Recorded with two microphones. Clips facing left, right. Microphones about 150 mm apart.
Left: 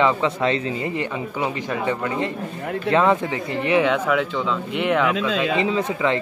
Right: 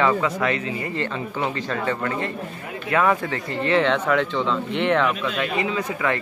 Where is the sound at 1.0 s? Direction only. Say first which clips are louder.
Left 1 dB; 15° left (ahead or behind).